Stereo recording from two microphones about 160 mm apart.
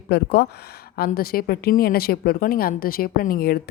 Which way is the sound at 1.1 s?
70° left (ahead or behind).